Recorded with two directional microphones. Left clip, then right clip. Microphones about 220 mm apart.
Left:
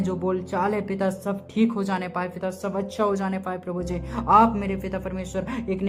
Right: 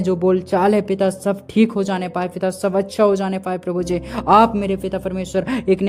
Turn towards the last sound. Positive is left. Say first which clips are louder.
# right 10 dB
turn(degrees=-40)  # may be behind; listen again after turning